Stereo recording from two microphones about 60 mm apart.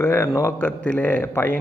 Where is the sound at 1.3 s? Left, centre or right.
Left.